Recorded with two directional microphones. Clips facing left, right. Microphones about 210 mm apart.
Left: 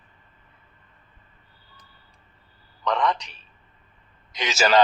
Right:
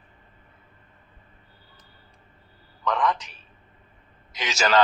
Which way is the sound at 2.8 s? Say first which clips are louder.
Left 1 dB; 5° right (ahead or behind).